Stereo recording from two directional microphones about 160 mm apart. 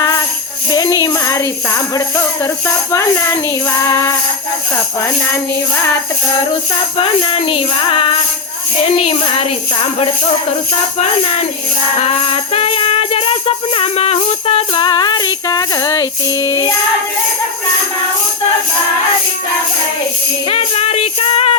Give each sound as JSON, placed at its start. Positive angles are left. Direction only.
{"t": 0.7, "sound": "speech", "side_deg": 20}
{"t": 7.0, "sound": "speech", "side_deg": 35}
{"t": 11.9, "sound": "music", "side_deg": 40}
{"t": 20.5, "sound": "speech", "side_deg": 40}